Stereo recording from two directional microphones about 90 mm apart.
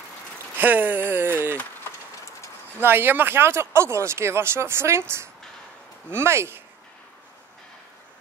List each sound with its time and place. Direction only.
0.6 s speech: 20° right (ahead or behind)
2.8 s speech: 25° right (ahead or behind)